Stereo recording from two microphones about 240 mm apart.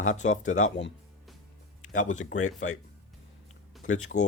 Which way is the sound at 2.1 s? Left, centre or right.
Left.